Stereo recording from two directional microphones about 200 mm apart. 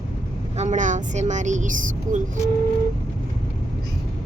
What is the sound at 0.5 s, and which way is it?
A woman's voice, 35° right (ahead or behind).